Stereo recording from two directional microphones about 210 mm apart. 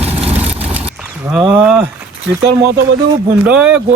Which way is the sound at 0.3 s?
30° right (ahead or behind).